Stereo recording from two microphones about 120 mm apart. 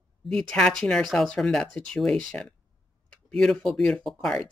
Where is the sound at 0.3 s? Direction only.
5° left (ahead or behind).